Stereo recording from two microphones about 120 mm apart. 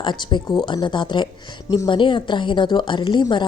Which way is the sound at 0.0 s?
40° left (ahead or behind).